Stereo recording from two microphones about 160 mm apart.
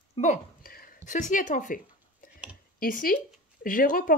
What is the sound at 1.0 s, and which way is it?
Speech, 50° left (ahead or behind).